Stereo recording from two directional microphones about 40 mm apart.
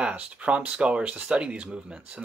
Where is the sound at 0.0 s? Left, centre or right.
Right.